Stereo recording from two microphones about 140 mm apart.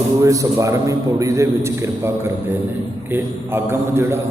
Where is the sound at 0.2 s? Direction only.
20° right (ahead or behind).